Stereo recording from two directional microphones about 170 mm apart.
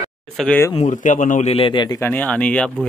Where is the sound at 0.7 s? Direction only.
45° left (ahead or behind); by 2.7 s 5° left (ahead or behind).